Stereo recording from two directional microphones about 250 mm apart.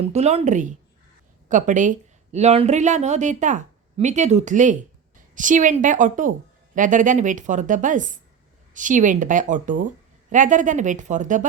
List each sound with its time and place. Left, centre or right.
0.0 s a woman's voice: right